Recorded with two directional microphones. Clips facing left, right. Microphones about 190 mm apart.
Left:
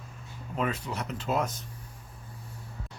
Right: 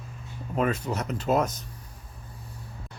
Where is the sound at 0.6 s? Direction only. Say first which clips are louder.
Right 5 dB; 45° right (ahead or behind).